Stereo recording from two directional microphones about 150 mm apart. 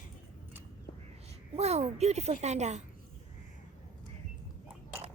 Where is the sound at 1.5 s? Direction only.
45° right (ahead or behind).